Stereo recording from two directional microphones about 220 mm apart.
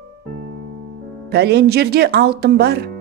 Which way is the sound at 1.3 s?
50° right (ahead or behind).